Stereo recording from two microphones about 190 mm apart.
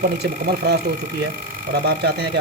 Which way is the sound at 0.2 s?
60° right (ahead or behind).